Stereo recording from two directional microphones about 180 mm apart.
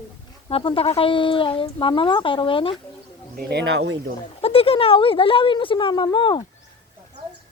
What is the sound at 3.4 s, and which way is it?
Speech, 65° right (ahead or behind).